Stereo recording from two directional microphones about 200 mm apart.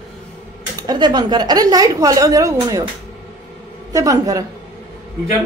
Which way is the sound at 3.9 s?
15° right (ahead or behind).